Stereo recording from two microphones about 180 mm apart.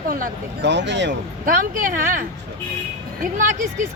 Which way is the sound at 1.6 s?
50° right (ahead or behind).